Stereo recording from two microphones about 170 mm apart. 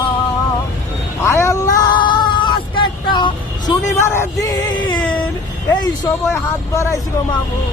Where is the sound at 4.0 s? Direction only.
15° left (ahead or behind).